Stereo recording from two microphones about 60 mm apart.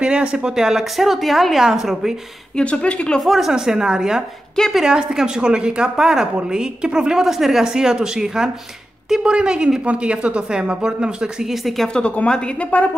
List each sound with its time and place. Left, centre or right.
0.0 s a woman's voice: centre
2.5 s speech: centre
3.2 s a woman's voice: centre
11.9 s speech: centre